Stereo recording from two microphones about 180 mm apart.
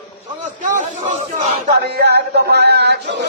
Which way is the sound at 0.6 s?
45° right (ahead or behind).